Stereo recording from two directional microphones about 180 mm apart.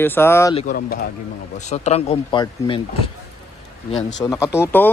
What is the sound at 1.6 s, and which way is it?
Speech, 40° left (ahead or behind).